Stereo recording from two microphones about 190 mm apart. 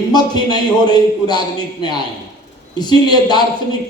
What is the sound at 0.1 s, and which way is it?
A man's voice, 20° left (ahead or behind).